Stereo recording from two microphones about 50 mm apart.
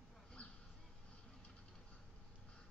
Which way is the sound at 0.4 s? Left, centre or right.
Left.